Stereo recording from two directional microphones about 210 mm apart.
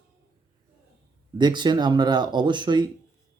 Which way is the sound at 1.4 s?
20° right (ahead or behind).